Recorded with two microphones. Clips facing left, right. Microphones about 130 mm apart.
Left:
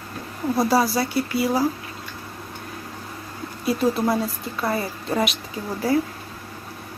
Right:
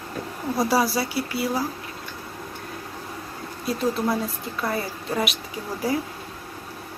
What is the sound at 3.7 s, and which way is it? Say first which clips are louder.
A woman's voice: left 3 dB; 5° left (ahead or behind).